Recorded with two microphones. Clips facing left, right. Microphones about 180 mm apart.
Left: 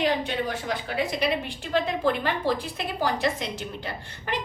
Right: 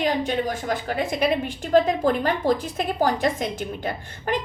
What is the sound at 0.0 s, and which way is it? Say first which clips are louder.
A woman's voice: right 2 dB; 45° right (ahead or behind).